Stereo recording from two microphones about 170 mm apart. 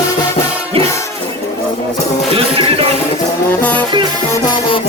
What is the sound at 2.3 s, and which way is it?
Music, 30° right (ahead or behind).